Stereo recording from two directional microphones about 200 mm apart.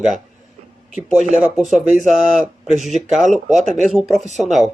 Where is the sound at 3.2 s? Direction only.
35° right (ahead or behind).